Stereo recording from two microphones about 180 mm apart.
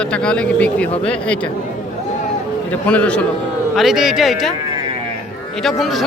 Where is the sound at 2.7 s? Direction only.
5° left (ahead or behind).